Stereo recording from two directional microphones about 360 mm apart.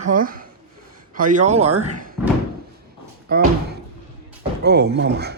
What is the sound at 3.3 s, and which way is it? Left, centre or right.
Speech, right.